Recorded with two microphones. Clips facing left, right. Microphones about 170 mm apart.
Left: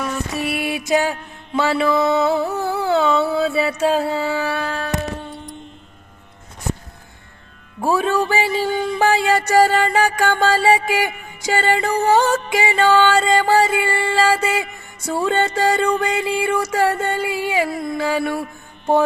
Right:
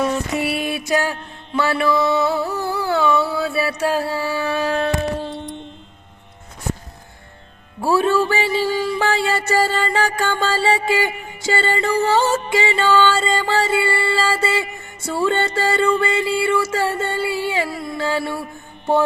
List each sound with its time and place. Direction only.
0.0 s mantra: 25° right (ahead or behind)
0.6 s mantra: 15° left (ahead or behind)
4.5 s a sound: 10° right (ahead or behind)
7.8 s music: 15° left (ahead or behind)